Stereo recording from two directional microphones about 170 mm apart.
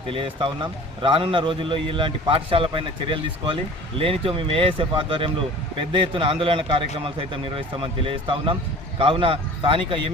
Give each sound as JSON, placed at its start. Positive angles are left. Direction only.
{"t": 0.1, "sound": "a man's voice", "side_deg": -30}